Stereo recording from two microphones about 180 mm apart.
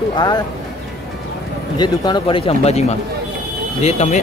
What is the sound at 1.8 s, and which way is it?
Speech, 25° left (ahead or behind).